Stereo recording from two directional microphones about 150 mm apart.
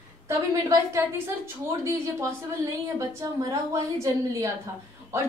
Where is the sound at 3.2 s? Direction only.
20° right (ahead or behind).